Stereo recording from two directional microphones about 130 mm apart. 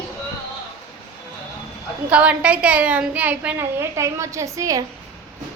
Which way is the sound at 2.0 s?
10° right (ahead or behind).